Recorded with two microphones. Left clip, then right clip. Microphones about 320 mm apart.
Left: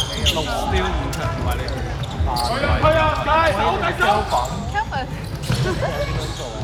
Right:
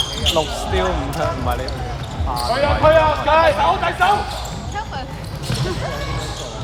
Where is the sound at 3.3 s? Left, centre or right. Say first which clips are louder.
Right 4 dB; right.